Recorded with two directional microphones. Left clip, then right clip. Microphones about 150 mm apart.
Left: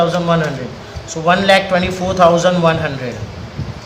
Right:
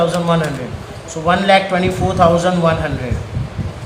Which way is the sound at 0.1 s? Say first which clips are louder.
Left 1 dB; 20° left (ahead or behind).